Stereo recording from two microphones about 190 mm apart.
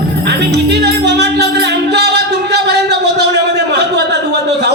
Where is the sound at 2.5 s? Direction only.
60° right (ahead or behind).